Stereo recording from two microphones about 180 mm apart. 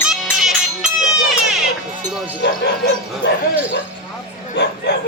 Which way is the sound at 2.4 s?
70° left (ahead or behind).